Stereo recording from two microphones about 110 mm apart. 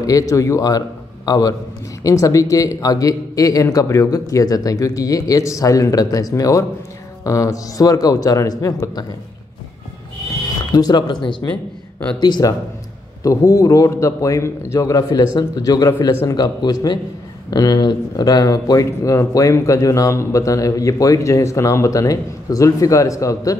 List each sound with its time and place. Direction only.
0.0 s a man's voice: 30° left (ahead or behind)
10.7 s speech: 40° left (ahead or behind)